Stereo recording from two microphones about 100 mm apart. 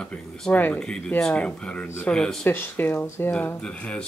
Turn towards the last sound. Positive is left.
turn(degrees=10)  # may be behind; listen again after turning